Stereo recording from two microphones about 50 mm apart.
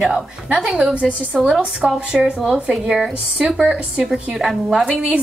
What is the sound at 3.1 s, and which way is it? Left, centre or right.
A woman's voice, centre.